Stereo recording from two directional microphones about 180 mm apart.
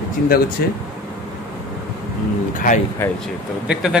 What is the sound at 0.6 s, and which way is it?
Speech, 60° left (ahead or behind).